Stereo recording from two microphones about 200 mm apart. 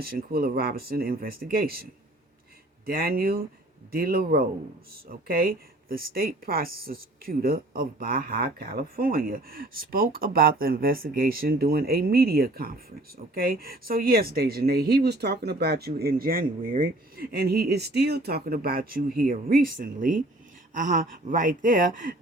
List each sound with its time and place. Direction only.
0.0 s speech: 50° right (ahead or behind)